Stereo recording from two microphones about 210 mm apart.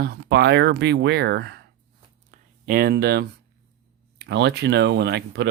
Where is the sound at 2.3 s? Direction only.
40° right (ahead or behind).